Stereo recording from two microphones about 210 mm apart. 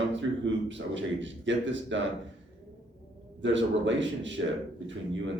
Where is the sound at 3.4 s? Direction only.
60° right (ahead or behind).